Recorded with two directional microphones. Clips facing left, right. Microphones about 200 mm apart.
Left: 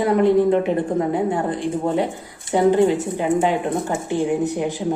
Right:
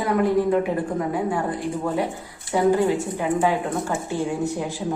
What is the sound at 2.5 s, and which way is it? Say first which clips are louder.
Speech: left 3 dB; 20° left (ahead or behind).